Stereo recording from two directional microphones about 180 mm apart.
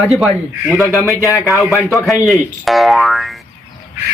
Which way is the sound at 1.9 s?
Centre (ahead or behind).